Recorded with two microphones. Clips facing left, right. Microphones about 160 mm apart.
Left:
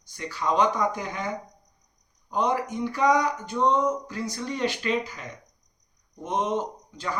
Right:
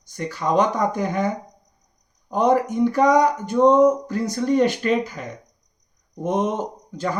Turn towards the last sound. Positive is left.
turn(degrees=-45)  # may be behind; listen again after turning